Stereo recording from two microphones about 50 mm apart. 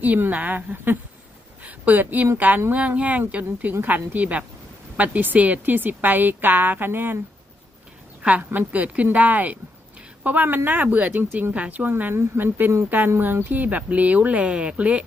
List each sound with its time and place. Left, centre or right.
0.0 s speech: right
8.2 s a woman's voice: right
8.4 s speech: right
11.5 s speech: right